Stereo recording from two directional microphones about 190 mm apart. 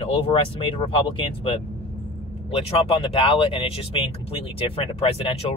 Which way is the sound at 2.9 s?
30° left (ahead or behind).